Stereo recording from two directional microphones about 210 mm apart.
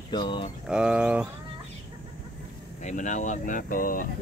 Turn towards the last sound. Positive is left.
turn(degrees=40)  # may be behind; listen again after turning